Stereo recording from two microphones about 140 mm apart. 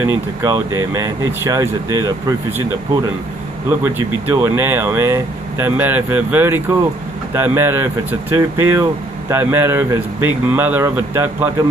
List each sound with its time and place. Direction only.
0.0 s speech: 20° right (ahead or behind)
3.6 s speech: 20° right (ahead or behind)